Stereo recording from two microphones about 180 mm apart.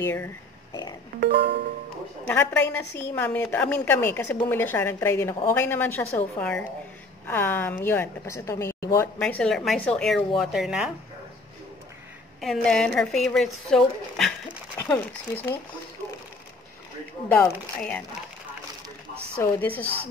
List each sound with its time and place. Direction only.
0.0 s a woman's voice: 10° left (ahead or behind)
1.2 s music: 70° right (ahead or behind)
2.2 s a woman's voice: 10° left (ahead or behind); by 10.9 s 5° right (ahead or behind)
12.4 s a woman's voice: centre (ahead or behind)
17.3 s a woman's voice: 10° left (ahead or behind)
19.3 s a woman's voice: 10° left (ahead or behind)